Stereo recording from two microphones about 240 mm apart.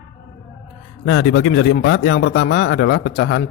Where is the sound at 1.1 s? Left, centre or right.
Left.